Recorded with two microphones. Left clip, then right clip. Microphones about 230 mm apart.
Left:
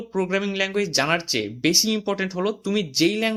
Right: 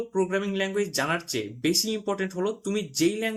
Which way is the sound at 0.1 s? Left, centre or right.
Left.